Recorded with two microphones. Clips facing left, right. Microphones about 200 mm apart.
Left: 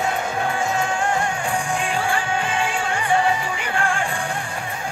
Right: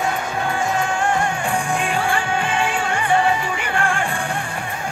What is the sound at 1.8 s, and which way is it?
Music, 60° right (ahead or behind).